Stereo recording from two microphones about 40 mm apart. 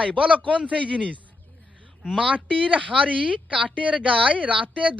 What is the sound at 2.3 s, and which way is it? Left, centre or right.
A woman's voice, right.